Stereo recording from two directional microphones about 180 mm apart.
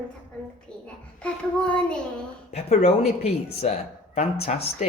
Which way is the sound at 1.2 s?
5° left (ahead or behind).